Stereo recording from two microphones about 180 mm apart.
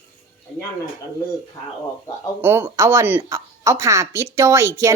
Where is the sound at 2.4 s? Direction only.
15° right (ahead or behind).